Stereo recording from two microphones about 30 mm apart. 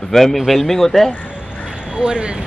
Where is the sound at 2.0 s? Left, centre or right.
Right.